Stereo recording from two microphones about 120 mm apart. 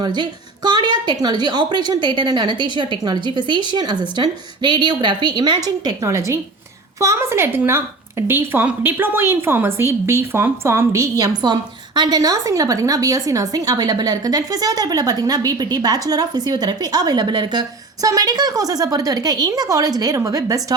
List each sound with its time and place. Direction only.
0.0 s a woman's voice: 40° right (ahead or behind)